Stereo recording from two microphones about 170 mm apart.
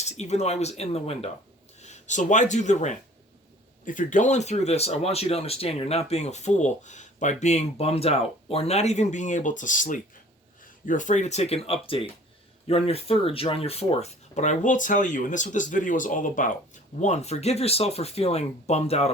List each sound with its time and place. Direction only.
0.0 s speech: 40° left (ahead or behind)